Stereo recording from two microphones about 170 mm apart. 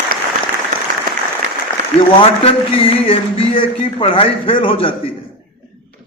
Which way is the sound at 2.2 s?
35° left (ahead or behind).